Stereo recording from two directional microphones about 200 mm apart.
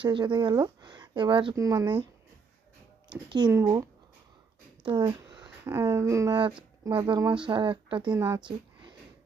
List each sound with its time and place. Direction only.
0.0 s speech: 25° right (ahead or behind)
3.2 s speech: 20° right (ahead or behind)
4.9 s speech: 20° right (ahead or behind)
8.1 s speech: 10° right (ahead or behind)